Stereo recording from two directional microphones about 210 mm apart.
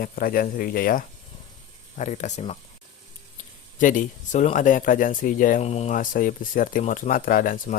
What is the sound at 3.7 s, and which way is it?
Speech, 40° left (ahead or behind).